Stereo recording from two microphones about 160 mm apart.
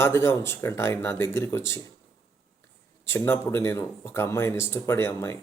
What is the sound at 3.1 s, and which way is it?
Speech, 15° left (ahead or behind).